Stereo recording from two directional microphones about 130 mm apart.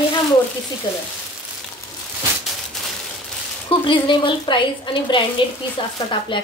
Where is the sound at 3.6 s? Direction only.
40° left (ahead or behind).